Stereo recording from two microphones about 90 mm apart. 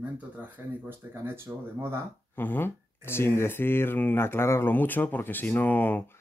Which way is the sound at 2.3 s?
25° left (ahead or behind).